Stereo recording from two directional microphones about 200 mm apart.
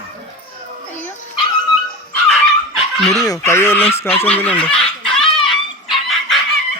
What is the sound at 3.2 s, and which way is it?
Speech, 15° left (ahead or behind).